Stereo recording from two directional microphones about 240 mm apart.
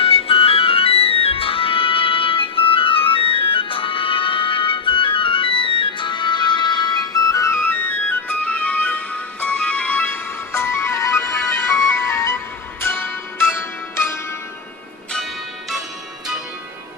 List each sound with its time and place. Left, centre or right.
0.0 s music: left